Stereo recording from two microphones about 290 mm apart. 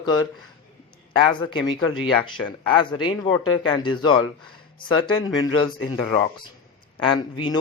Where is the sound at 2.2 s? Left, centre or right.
Centre.